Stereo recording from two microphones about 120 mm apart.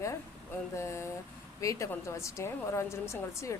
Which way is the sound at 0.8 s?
25° left (ahead or behind).